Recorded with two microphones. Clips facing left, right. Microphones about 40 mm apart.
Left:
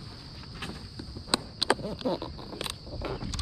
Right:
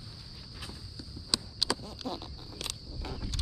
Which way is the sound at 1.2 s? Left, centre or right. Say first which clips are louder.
Left 6 dB; left.